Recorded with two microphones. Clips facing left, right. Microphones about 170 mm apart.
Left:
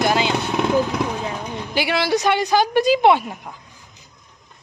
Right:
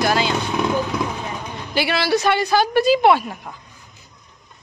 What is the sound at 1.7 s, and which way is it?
A woman's voice, 15° left (ahead or behind).